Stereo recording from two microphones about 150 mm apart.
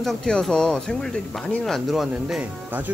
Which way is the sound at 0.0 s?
5° left (ahead or behind).